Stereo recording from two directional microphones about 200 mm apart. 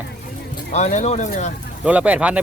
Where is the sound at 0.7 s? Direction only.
35° left (ahead or behind).